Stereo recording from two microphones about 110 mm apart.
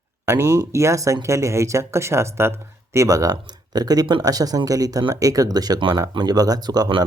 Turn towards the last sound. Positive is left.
turn(degrees=-40)  # may be behind; listen again after turning